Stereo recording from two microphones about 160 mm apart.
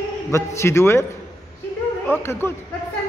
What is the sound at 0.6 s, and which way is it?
Speech, 15° left (ahead or behind).